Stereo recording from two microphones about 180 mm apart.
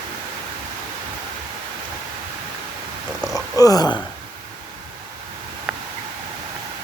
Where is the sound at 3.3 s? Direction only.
20° left (ahead or behind).